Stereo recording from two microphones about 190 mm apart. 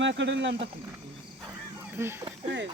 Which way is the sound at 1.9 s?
15° right (ahead or behind).